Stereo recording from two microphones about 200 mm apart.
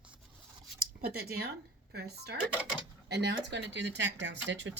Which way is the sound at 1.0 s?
50° right (ahead or behind).